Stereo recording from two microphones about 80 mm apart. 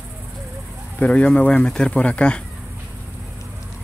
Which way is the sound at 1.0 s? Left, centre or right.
Centre.